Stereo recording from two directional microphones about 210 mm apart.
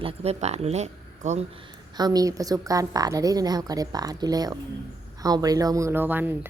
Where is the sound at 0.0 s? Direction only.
30° right (ahead or behind).